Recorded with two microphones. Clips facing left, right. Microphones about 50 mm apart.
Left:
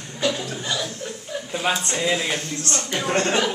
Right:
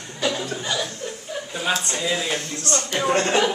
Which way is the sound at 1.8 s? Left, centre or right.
Left.